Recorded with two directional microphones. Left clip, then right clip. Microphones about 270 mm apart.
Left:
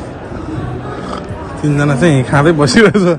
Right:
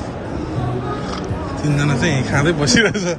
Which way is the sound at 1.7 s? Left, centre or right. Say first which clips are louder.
Left 7 dB; centre.